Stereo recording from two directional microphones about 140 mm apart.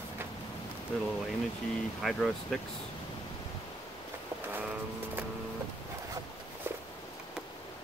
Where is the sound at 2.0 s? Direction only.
Centre (ahead or behind).